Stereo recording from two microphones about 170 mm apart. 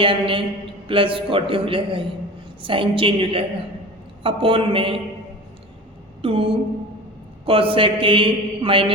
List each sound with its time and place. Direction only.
0.0 s a man's voice: 30° right (ahead or behind)
6.2 s a man's voice: 35° right (ahead or behind)